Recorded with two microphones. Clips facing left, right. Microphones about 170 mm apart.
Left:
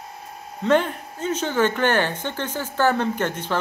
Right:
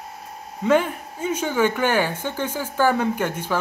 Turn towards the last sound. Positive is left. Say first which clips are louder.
# right 1 dB
turn(degrees=-10)  # may be behind; listen again after turning